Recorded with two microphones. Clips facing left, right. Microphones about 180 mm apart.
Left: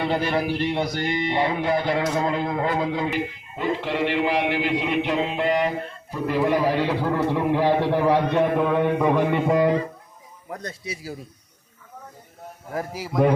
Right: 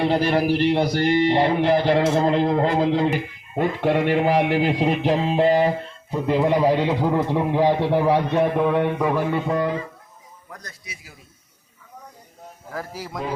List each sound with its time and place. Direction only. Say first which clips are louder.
0.4 s speech: right 5 dB; 70° right (ahead or behind)
0.7 s a man's voice: right 6 dB; 35° right (ahead or behind)
3.1 s a man's voice: right 2 dB; 50° right (ahead or behind); by 5.7 s 30° right (ahead or behind)
6.1 s a man's voice: right 2 dB; 20° right (ahead or behind)
9.0 s mantra: left 2 dB; 5° right (ahead or behind)
9.3 s mantra: left 3 dB; 20° left (ahead or behind)
10.5 s speech: left 9 dB; 30° left (ahead or behind)
12.7 s speech: left 3 dB; 15° left (ahead or behind)